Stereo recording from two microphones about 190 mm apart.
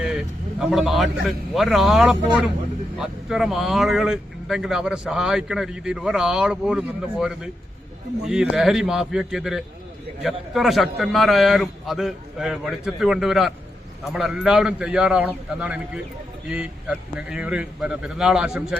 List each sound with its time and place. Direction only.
0.0 s a man's voice: 5° right (ahead or behind)